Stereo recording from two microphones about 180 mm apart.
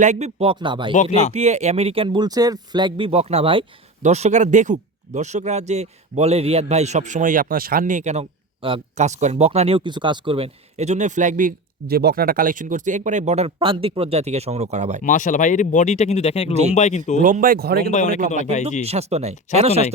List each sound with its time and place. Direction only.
0.0 s speech: 40° right (ahead or behind)
1.3 s speech: 40° right (ahead or behind)
4.0 s speech: 40° right (ahead or behind)
15.0 s speech: 45° left (ahead or behind)
17.2 s speech: 50° right (ahead or behind)
17.9 s speech: 40° left (ahead or behind)
18.9 s speech: 35° right (ahead or behind)